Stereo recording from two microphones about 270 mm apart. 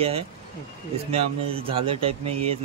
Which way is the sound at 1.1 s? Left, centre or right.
Right.